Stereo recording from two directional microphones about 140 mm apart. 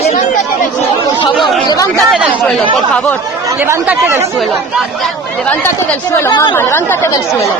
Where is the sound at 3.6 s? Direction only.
15° right (ahead or behind).